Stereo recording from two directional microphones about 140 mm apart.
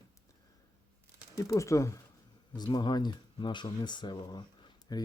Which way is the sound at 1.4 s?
20° left (ahead or behind).